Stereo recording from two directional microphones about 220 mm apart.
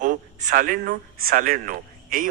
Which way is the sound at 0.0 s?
35° right (ahead or behind).